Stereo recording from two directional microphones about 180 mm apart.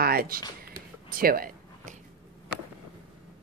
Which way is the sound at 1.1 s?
50° right (ahead or behind).